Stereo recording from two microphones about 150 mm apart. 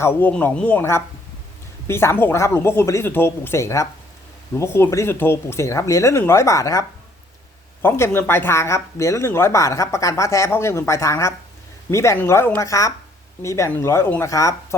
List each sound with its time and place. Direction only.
0.0 s speech: 15° left (ahead or behind)